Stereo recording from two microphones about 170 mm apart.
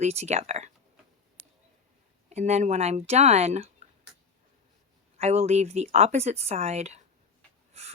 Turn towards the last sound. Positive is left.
turn(degrees=-40)  # may be behind; listen again after turning